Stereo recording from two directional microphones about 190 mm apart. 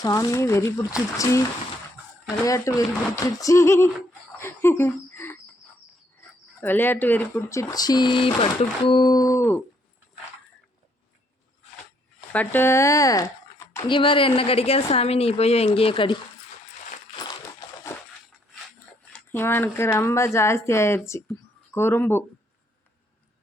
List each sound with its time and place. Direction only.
0.0 s speech: 20° left (ahead or behind)
4.4 s a sound: 15° left (ahead or behind)
6.6 s speech: 10° left (ahead or behind)
12.3 s a woman's voice: 10° left (ahead or behind); by 16.1 s 30° left (ahead or behind)
19.3 s speech: 10° left (ahead or behind)